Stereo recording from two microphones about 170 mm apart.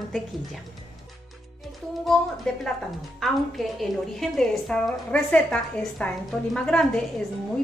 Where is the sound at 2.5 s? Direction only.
Centre (ahead or behind).